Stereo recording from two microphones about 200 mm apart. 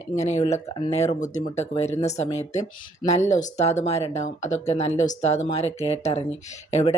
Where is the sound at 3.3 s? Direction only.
35° left (ahead or behind).